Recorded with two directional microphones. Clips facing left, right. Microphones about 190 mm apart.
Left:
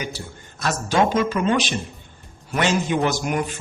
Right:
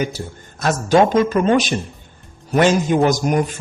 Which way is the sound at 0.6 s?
45° right (ahead or behind).